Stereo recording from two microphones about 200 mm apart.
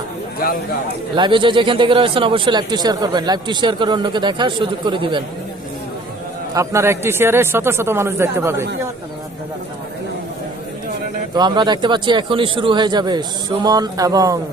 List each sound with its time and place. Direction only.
0.4 s speech: 45° left (ahead or behind)
1.1 s a man's voice: 25° right (ahead or behind)
6.5 s speech: 15° right (ahead or behind)
11.3 s a man's voice: 20° right (ahead or behind)